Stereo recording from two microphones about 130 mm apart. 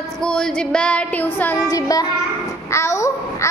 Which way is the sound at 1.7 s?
30° left (ahead or behind).